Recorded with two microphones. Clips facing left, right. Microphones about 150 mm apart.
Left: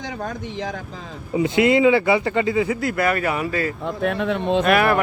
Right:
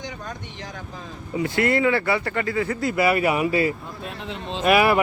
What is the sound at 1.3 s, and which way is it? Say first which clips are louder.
Speech: left 5 dB; 20° left (ahead or behind).